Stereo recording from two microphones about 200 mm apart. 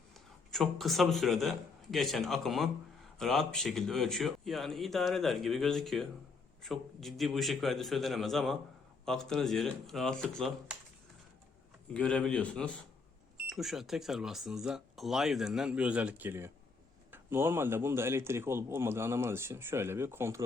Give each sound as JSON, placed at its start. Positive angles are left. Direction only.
{"t": 0.5, "sound": "speech", "side_deg": 0}
{"t": 11.9, "sound": "speech", "side_deg": 5}